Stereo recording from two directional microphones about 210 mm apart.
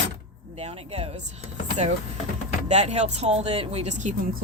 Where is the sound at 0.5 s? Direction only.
30° right (ahead or behind).